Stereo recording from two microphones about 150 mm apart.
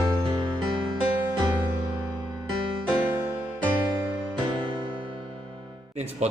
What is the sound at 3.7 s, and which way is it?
Music, 15° right (ahead or behind).